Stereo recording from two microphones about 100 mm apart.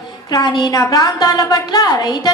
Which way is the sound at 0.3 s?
40° left (ahead or behind).